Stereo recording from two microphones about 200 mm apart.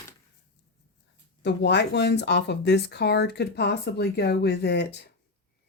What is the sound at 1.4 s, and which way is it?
Speech, 60° left (ahead or behind).